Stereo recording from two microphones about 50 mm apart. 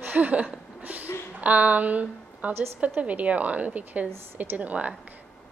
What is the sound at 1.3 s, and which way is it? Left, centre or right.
Speech, right.